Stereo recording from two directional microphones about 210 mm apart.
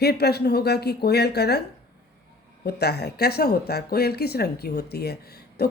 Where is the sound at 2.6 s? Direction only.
50° left (ahead or behind).